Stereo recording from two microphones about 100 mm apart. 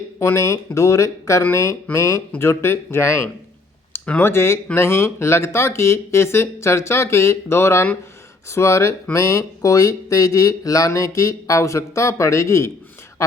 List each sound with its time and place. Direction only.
0.2 s speech: 30° left (ahead or behind)